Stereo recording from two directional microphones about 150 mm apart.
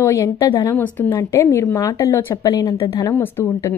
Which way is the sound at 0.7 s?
10° left (ahead or behind).